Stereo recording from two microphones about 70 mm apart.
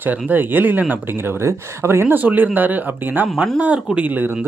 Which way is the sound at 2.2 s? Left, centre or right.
Right.